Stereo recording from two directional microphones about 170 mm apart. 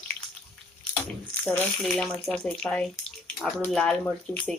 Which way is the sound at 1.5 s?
5° left (ahead or behind).